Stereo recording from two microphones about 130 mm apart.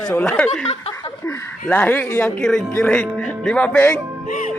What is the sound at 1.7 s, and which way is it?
Speech, 15° left (ahead or behind).